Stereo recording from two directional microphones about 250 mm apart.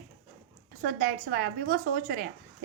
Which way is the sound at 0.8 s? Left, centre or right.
Right.